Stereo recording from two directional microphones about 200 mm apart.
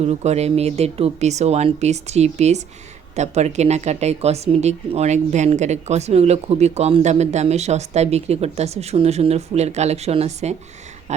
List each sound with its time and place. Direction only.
0.0 s speech: 30° right (ahead or behind)